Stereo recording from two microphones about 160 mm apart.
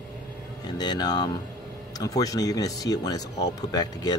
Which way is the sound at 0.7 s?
25° left (ahead or behind).